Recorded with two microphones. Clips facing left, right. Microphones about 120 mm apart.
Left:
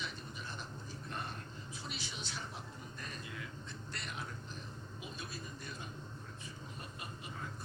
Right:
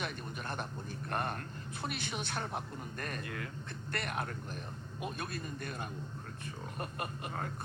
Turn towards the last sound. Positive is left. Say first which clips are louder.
# right 7 dB
turn(degrees=-60)  # may be behind; listen again after turning